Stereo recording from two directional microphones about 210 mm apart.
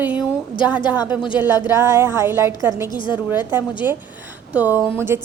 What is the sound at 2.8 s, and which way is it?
Speech, 20° left (ahead or behind).